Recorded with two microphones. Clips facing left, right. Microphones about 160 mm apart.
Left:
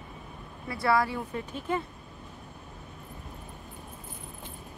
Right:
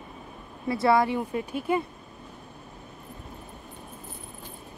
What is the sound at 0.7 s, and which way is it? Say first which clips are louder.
Speech: right 4 dB; 25° right (ahead or behind).